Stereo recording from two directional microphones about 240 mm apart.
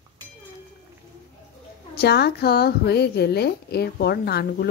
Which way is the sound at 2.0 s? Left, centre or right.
Left.